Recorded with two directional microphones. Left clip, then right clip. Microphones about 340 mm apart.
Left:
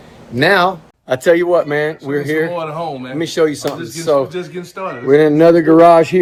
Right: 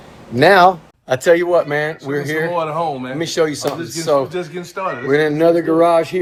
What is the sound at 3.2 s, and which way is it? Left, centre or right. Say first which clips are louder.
Speech: left 4 dB; centre.